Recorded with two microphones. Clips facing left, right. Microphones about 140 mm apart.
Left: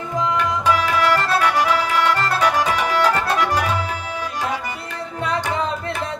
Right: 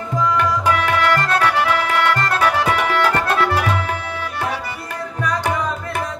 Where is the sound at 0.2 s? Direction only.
20° left (ahead or behind).